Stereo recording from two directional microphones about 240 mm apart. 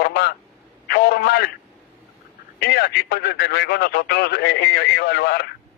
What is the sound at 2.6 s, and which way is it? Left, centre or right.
Speech, left.